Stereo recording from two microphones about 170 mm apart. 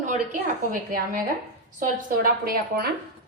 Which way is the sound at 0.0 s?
50° right (ahead or behind).